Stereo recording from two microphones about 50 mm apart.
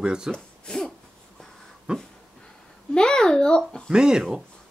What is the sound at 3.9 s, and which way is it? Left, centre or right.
Speech, centre.